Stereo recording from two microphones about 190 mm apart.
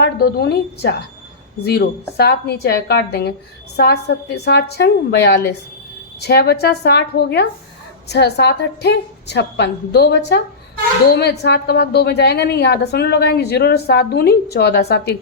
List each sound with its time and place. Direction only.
0.0 s a woman's voice: 60° left (ahead or behind)